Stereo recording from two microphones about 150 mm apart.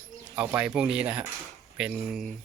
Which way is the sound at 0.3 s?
10° right (ahead or behind).